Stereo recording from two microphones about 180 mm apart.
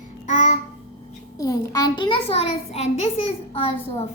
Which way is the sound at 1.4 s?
20° left (ahead or behind).